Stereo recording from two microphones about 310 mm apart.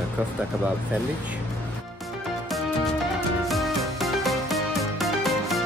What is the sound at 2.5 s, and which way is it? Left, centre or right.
Music, centre.